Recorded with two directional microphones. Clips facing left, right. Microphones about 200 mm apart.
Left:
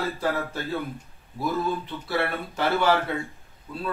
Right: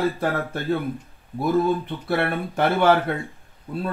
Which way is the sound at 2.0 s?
50° right (ahead or behind).